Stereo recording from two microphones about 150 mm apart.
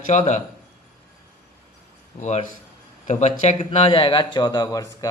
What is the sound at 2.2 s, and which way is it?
Speech, 50° left (ahead or behind).